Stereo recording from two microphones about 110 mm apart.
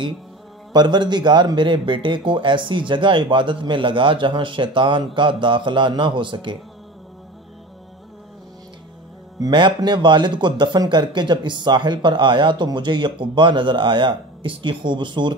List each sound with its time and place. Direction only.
0.7 s speech: 45° right (ahead or behind)
9.4 s speech: 45° right (ahead or behind)